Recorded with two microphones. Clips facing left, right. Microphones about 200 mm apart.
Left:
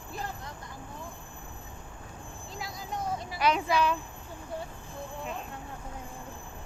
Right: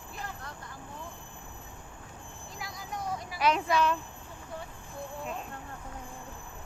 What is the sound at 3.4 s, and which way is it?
Speech, centre (ahead or behind).